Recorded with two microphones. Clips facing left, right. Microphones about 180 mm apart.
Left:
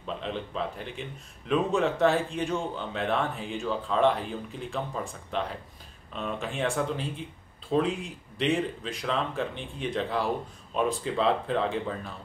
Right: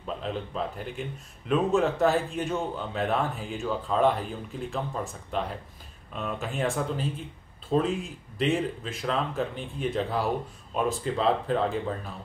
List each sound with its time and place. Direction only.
0.0 s speech: 5° right (ahead or behind)